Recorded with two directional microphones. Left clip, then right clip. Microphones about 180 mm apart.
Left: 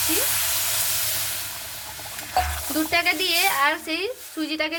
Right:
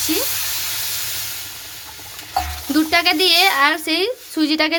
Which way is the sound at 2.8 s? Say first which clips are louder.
Right 6 dB; 65° right (ahead or behind).